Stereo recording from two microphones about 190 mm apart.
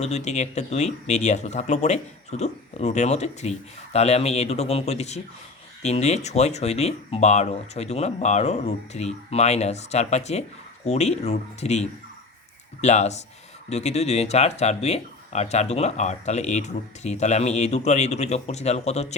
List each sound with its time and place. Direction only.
0.0 s speech: 35° left (ahead or behind)